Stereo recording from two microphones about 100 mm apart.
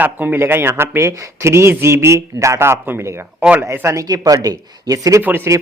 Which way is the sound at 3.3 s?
15° right (ahead or behind).